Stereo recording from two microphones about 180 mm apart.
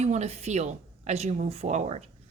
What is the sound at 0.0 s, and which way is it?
Speech, 40° right (ahead or behind).